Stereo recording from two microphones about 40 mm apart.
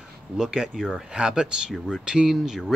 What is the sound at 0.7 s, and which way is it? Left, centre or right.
Speech, centre.